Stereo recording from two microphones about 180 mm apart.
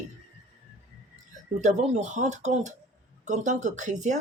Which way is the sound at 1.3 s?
40° right (ahead or behind).